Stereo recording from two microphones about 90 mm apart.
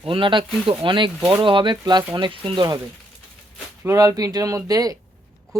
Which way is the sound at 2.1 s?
70° right (ahead or behind).